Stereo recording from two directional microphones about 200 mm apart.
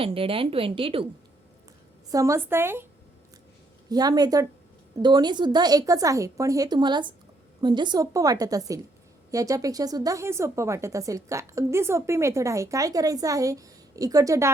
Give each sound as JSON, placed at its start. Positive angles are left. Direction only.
{"t": 0.0, "sound": "speech", "side_deg": -25}
{"t": 2.0, "sound": "speech", "side_deg": -15}
{"t": 3.8, "sound": "speech", "side_deg": -20}